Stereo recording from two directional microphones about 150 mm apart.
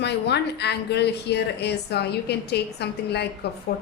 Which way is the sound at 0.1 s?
90° left.